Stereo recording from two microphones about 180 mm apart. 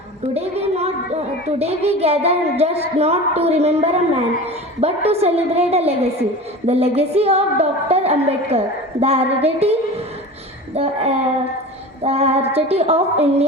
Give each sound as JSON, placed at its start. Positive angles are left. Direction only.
{"t": 0.2, "sound": "a woman's voice", "side_deg": -35}
{"t": 10.8, "sound": "a woman's voice", "side_deg": -35}